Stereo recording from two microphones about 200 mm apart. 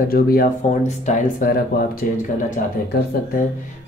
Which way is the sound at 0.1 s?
50° left (ahead or behind).